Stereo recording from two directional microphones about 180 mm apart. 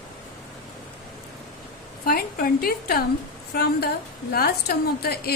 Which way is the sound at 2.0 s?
55° left (ahead or behind).